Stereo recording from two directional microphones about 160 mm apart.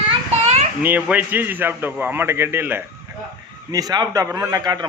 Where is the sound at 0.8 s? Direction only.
10° right (ahead or behind).